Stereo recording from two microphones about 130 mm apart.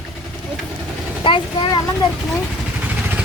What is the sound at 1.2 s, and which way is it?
Speech, 35° left (ahead or behind).